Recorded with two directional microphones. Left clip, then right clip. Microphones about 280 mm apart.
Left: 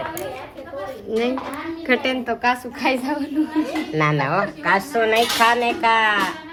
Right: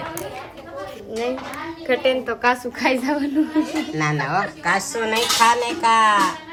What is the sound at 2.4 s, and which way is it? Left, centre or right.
Speech, centre.